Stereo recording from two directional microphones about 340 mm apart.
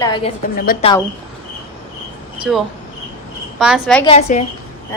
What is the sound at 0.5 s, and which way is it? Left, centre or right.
Speech, left.